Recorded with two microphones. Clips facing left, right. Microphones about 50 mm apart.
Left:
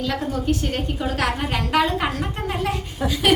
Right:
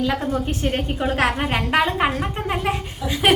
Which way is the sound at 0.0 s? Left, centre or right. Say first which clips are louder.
Right 2 dB; right.